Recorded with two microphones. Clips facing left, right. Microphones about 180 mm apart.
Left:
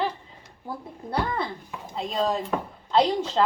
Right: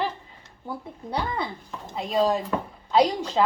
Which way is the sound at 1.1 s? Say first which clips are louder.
Left 1 dB; centre (ahead or behind).